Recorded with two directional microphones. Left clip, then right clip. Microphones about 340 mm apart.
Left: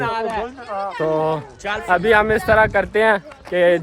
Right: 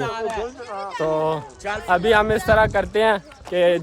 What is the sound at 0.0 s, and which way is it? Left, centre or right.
Speech, left.